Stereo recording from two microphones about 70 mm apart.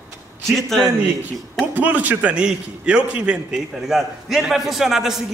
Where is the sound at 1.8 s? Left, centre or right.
Right.